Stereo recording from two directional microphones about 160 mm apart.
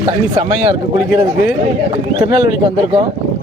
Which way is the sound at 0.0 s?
30° right (ahead or behind).